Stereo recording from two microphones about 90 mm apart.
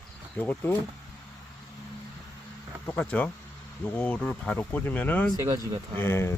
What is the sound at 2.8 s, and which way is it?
Speech, 15° left (ahead or behind).